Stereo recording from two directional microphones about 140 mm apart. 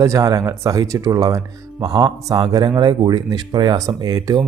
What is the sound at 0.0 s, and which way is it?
Speech, 25° right (ahead or behind).